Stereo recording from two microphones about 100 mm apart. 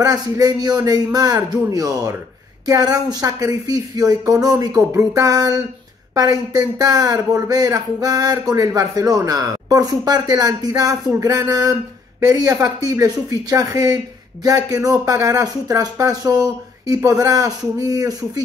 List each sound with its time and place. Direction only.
0.0 s speech: 40° right (ahead or behind)